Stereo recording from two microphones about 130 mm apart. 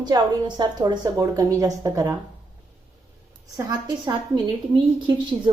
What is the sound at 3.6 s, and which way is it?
A woman's voice, 35° right (ahead or behind).